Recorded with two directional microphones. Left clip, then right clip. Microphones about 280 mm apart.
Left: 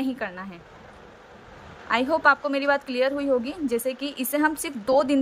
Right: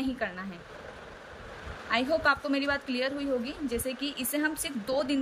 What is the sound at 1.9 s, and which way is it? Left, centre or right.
A woman's voice, centre.